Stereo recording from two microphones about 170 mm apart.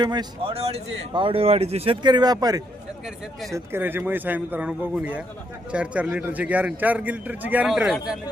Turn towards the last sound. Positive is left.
turn(degrees=0)  # may be behind; listen again after turning